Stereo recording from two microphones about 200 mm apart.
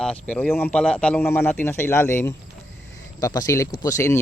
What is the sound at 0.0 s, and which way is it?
Speech, 5° left (ahead or behind).